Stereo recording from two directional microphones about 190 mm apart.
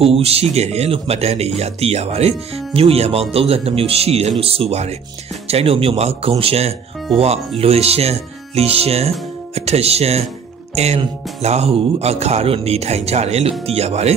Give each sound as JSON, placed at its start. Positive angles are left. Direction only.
{"t": 0.0, "sound": "speech", "side_deg": -30}